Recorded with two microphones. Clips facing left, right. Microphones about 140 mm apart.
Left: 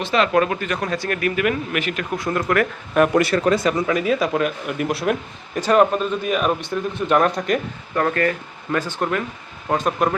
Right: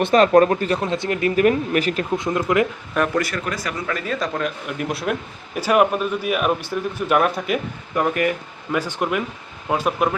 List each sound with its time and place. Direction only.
0.0 s a man's voice: 40° right (ahead or behind); by 1.3 s 20° right (ahead or behind)
1.4 s a man's voice: 35° right (ahead or behind)
2.1 s speech: 20° right (ahead or behind)
3.2 s a man's voice: 30° left (ahead or behind); by 10.2 s 5° right (ahead or behind)